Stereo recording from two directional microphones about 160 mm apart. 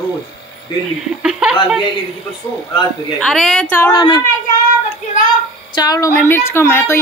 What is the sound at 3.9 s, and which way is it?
Speech, 25° left (ahead or behind).